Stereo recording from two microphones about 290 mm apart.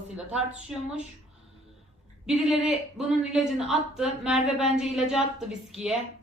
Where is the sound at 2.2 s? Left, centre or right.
Centre.